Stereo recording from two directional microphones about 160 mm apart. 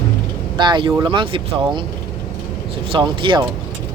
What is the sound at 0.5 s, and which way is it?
Speech, 30° right (ahead or behind).